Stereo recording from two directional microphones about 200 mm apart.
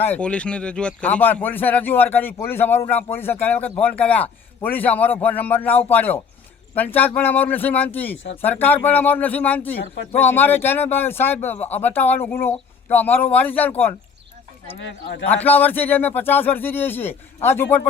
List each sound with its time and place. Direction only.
0.0 s speech: 10° left (ahead or behind)
14.8 s speech: 65° left (ahead or behind)
15.4 s speech: 10° left (ahead or behind)